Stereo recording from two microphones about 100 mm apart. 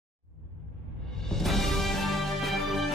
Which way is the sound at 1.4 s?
Centre (ahead or behind).